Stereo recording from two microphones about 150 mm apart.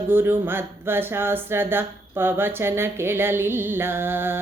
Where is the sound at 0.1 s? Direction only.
15° right (ahead or behind).